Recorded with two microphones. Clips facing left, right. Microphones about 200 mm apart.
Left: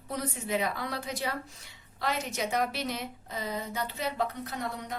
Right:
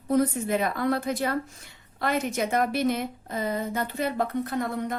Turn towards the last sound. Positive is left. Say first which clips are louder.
# right 7 dB
turn(degrees=-50)  # may be behind; listen again after turning